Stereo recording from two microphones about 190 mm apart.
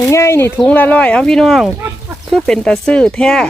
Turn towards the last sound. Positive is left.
turn(degrees=5)  # may be behind; listen again after turning